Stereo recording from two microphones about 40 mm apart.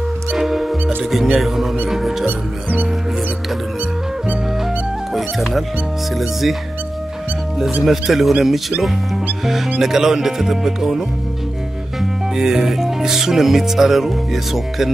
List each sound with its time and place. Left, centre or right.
0.4 s music: centre
2.2 s music: right
5.1 s music: centre
7.8 s speech: centre